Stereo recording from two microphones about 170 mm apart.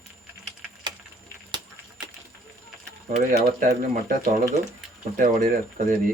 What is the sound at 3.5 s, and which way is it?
Speech, 50° right (ahead or behind).